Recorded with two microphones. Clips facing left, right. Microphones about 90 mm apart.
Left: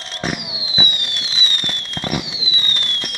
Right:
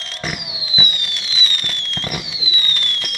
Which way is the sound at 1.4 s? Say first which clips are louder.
Even; 25° left (ahead or behind).